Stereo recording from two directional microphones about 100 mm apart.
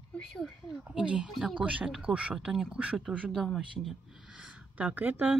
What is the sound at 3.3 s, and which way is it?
Speech, centre (ahead or behind).